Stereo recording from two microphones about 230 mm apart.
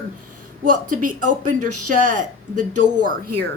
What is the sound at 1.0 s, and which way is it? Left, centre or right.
Speech, right.